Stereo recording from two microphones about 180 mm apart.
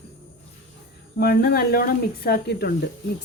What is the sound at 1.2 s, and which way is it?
A woman's voice, 60° left (ahead or behind).